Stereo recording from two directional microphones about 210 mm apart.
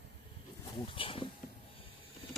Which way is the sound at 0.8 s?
25° left (ahead or behind).